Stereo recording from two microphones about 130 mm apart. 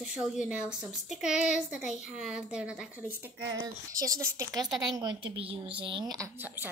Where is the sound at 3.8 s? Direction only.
25° right (ahead or behind).